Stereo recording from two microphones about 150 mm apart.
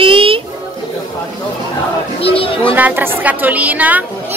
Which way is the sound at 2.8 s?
10° right (ahead or behind).